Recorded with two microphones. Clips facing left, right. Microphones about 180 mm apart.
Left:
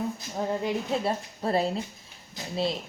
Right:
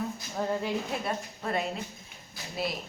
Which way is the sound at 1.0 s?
30° left (ahead or behind).